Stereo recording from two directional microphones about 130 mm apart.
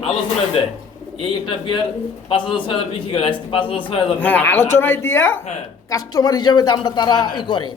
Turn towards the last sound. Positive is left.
turn(degrees=35)  # may be behind; listen again after turning